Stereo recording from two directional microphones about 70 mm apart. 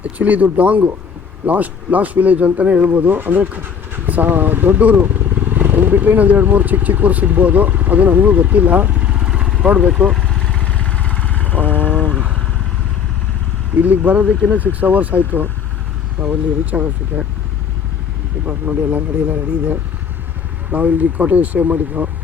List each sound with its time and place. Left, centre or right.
0.0 s speech: right
10.3 s vehicle: centre
12.1 s vehicle: centre
13.7 s speech: right
18.4 s speech: right